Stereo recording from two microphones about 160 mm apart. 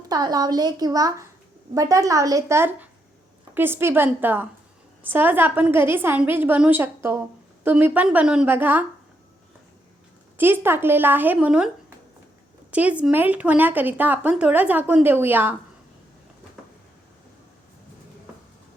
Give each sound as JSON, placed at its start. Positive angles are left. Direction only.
{"t": 0.1, "sound": "a woman's voice", "side_deg": -25}
{"t": 10.3, "sound": "a woman's voice", "side_deg": -15}
{"t": 12.7, "sound": "a woman's voice", "side_deg": -10}